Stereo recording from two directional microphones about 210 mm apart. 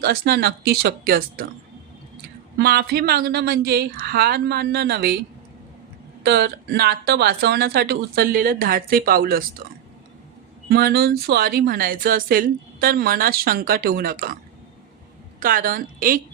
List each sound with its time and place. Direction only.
0.0 s a woman's voice: 45° right (ahead or behind)
2.6 s a woman's voice: 50° right (ahead or behind)
6.2 s a woman's voice: 50° right (ahead or behind)
10.7 s a woman's voice: 45° right (ahead or behind)
15.4 s a woman's voice: 40° right (ahead or behind)